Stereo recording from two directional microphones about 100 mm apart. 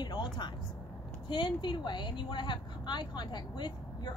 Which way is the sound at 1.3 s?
50° left (ahead or behind).